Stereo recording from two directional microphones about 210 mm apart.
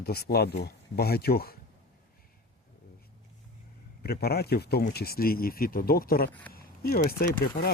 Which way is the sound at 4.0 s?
50° left (ahead or behind).